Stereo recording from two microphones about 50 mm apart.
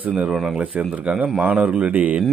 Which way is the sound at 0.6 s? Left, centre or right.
Right.